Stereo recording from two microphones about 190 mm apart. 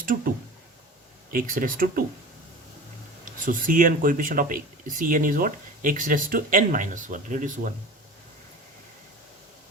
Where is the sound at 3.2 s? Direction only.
45° right (ahead or behind).